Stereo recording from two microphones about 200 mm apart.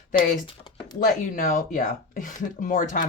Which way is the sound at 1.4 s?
45° left (ahead or behind).